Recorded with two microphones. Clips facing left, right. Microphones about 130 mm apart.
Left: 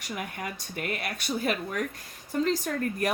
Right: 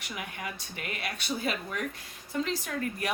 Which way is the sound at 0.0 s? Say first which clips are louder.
Left 3 dB; 50° left (ahead or behind).